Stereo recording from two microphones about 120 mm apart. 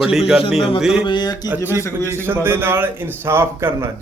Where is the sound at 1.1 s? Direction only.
35° left (ahead or behind).